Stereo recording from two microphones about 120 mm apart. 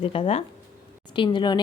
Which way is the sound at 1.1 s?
40° left (ahead or behind).